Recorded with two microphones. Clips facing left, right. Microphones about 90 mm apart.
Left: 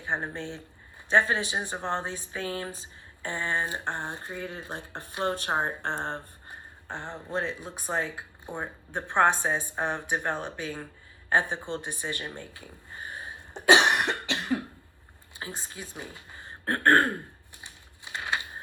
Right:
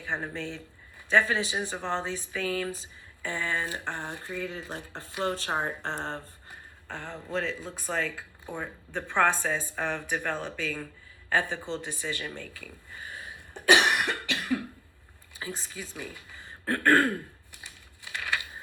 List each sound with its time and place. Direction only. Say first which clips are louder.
0.0 s speech: left 1 dB; 20° left (ahead or behind)
11.3 s a sound: left 2 dB; 20° left (ahead or behind)
15.4 s speech: right 1 dB; 20° left (ahead or behind)
16.9 s throat clearing: even; 20° left (ahead or behind)